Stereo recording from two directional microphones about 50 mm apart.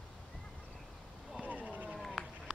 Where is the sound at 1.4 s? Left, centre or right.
Right.